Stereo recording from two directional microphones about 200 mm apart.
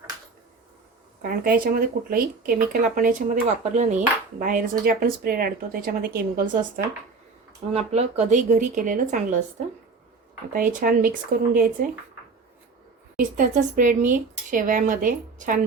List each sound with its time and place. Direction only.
1.2 s speech: 45° right (ahead or behind)
7.7 s speech: 30° right (ahead or behind)
10.5 s speech: 45° right (ahead or behind)
13.1 s speech: 40° right (ahead or behind)